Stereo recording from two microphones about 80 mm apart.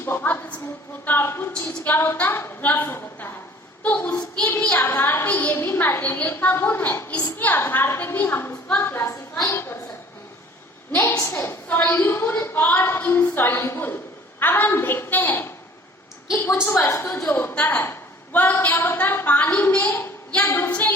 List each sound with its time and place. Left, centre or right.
0.0 s a woman's voice: left
11.2 s a woman's voice: left